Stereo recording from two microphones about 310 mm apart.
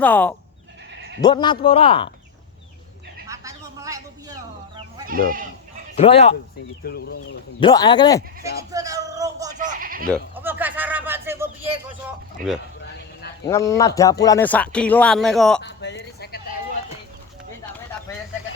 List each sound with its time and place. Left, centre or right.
0.0 s a man's voice: centre
3.2 s a sound: centre
5.0 s speech: right
6.0 s speech: centre
6.8 s speech: left
7.6 s a man's voice: centre
8.7 s a sound: centre
9.6 s bleat: right
10.1 s a sound: centre
11.9 s speech: centre
13.4 s speech: centre
15.6 s a sound: left